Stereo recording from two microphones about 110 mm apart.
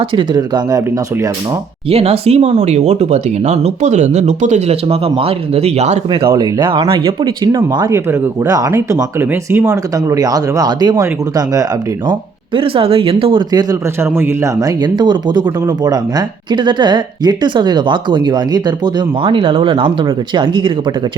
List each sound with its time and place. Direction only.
0.2 s speech: 40° right (ahead or behind)
1.9 s speech: 65° right (ahead or behind); by 6.0 s 90° right
6.3 s speech: 45° right (ahead or behind)
7.4 s speech: 40° right (ahead or behind)
12.5 s speech: 55° right (ahead or behind)
13.5 s speech: 35° right (ahead or behind)
14.0 s speech: 25° right (ahead or behind)
19.2 s speech: 55° right (ahead or behind)